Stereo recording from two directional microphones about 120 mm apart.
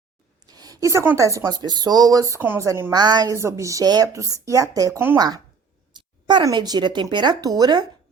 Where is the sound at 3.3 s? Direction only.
25° right (ahead or behind).